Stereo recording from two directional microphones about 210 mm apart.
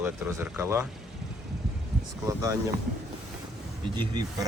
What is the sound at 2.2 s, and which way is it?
Speech, 15° right (ahead or behind).